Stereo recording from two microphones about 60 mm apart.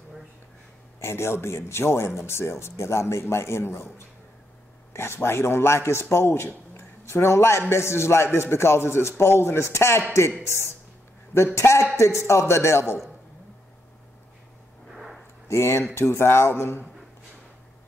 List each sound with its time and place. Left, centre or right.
0.9 s speech: left
4.9 s speech: left
15.4 s speech: left